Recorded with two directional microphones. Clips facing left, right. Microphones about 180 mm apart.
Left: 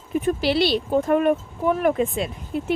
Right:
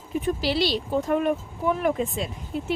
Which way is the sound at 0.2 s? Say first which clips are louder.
Left 4 dB; 55° left (ahead or behind).